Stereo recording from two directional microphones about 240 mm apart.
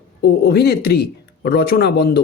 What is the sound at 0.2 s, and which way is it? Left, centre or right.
A man's voice, left.